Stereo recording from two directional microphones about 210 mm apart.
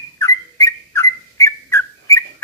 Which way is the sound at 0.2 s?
15° left (ahead or behind).